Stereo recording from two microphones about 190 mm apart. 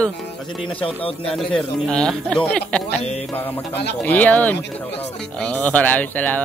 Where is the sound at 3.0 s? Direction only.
35° left (ahead or behind).